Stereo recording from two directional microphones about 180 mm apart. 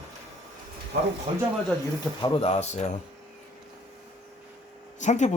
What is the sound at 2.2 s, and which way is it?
Speech, 25° left (ahead or behind).